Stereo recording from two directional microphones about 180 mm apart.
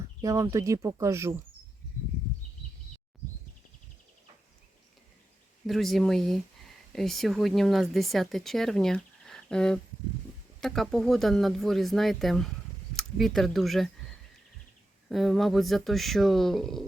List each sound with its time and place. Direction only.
0.2 s speech: 15° right (ahead or behind)
5.6 s speech: centre (ahead or behind)
15.1 s speech: centre (ahead or behind)